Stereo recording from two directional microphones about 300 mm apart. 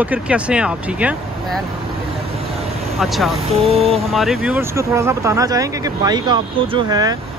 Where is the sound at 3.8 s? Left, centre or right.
Centre.